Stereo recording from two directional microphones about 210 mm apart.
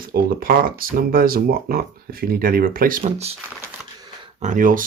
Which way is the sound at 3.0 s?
30° right (ahead or behind).